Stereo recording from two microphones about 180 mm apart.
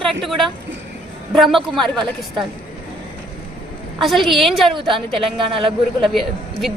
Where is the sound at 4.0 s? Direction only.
Centre (ahead or behind).